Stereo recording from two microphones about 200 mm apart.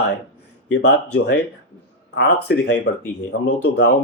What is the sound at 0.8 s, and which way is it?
Speech, 75° left (ahead or behind).